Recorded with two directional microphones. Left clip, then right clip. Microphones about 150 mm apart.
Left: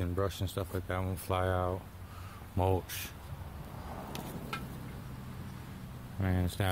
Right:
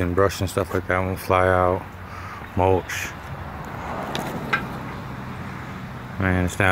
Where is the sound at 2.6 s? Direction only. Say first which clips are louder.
Right 13 dB; 15° left (ahead or behind).